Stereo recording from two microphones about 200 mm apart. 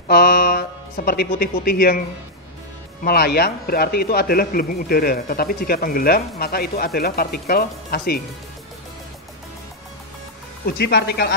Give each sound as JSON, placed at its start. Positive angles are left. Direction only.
{"t": 0.1, "sound": "speech", "side_deg": 50}
{"t": 3.0, "sound": "speech", "side_deg": 50}
{"t": 10.6, "sound": "speech", "side_deg": 55}